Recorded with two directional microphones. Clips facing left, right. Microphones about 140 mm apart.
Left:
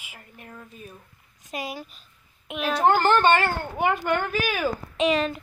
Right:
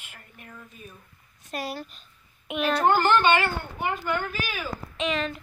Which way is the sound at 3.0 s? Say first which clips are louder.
Left 2 dB; 40° left (ahead or behind).